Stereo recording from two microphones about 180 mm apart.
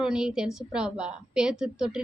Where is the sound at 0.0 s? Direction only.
5° right (ahead or behind).